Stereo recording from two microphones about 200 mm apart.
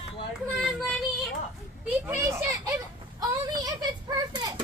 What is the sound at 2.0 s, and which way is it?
Children playing, 10° right (ahead or behind).